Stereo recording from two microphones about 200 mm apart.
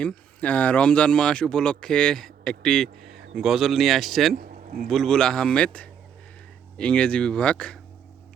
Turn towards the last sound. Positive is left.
turn(degrees=5)  # may be behind; listen again after turning